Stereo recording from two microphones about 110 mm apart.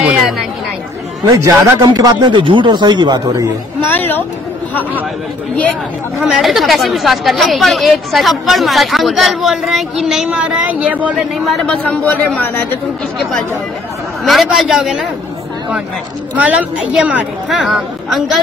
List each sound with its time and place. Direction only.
0.0 s chatter: 5° right (ahead or behind)
1.8 s a man's voice: 40° right (ahead or behind)
3.9 s speech: 20° left (ahead or behind)
6.1 s a woman's voice: centre (ahead or behind)
11.1 s a woman's voice: centre (ahead or behind)
11.6 s speech: 10° left (ahead or behind)
13.2 s a woman's voice: centre (ahead or behind)
16.3 s a woman's voice: 10° right (ahead or behind)